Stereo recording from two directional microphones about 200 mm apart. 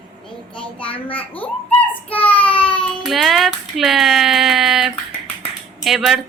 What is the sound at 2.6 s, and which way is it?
Speech, 5° left (ahead or behind).